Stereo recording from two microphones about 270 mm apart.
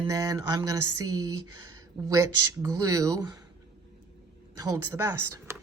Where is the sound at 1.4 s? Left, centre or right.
Right.